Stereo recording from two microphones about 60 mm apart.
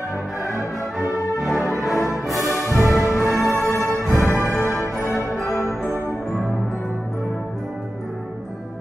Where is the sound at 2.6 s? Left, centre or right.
Left.